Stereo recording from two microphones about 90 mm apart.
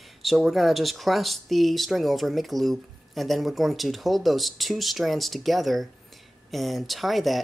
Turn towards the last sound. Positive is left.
turn(degrees=0)  # may be behind; listen again after turning